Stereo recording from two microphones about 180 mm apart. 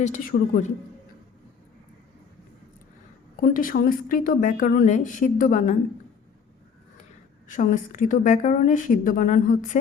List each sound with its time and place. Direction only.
0.0 s speech: 45° left (ahead or behind)
3.4 s speech: 50° left (ahead or behind)
7.4 s speech: 45° left (ahead or behind)